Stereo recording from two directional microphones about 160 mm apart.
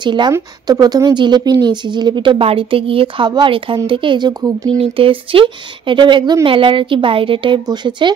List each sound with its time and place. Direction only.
0.0 s speech: 30° right (ahead or behind)
4.7 s speech: 35° right (ahead or behind)